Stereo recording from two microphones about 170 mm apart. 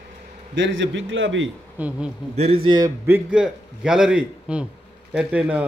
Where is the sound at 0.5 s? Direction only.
90° right.